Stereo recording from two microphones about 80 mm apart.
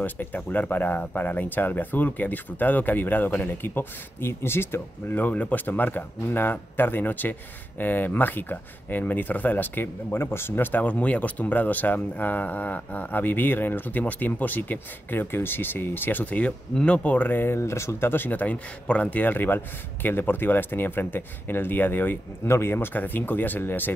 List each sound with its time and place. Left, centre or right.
0.0 s speech: left